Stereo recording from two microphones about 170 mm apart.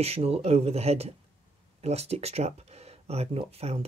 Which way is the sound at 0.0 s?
35° right (ahead or behind).